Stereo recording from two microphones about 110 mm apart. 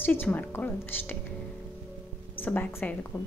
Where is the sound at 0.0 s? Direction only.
15° left (ahead or behind).